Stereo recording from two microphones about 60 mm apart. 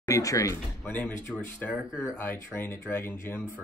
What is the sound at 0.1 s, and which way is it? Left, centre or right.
Speech, left.